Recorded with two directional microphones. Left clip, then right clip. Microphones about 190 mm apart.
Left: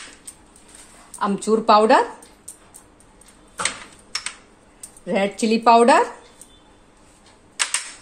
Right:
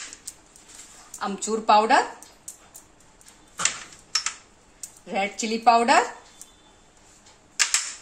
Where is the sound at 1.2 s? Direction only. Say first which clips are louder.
Left 6 dB; 50° left (ahead or behind).